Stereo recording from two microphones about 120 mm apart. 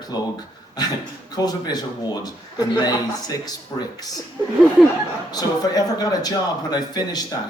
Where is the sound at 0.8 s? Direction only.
35° left (ahead or behind).